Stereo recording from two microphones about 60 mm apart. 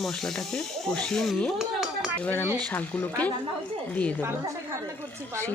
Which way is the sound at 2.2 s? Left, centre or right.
Left.